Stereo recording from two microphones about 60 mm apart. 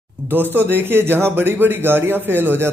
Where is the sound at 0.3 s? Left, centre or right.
Right.